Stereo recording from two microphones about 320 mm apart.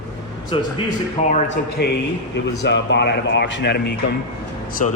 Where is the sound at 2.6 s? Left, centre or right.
Left.